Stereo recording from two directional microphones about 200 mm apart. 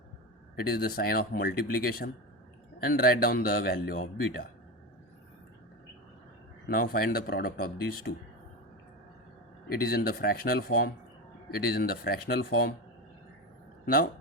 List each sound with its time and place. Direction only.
0.6 s speech: 50° left (ahead or behind)
6.7 s speech: 50° left (ahead or behind)
9.8 s speech: 50° left (ahead or behind)
13.8 s speech: 50° left (ahead or behind)